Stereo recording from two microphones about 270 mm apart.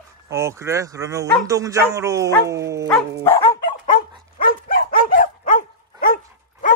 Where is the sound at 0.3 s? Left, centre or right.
Centre.